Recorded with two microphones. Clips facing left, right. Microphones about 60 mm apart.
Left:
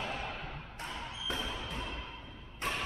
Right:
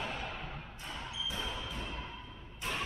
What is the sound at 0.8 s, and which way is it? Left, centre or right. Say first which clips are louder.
Basketball bounce: left 1 dB; centre.